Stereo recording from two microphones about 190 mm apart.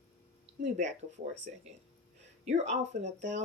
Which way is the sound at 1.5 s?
40° right (ahead or behind).